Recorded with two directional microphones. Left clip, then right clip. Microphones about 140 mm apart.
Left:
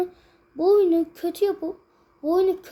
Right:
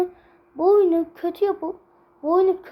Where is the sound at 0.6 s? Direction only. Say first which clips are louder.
Right 1 dB; 30° left (ahead or behind).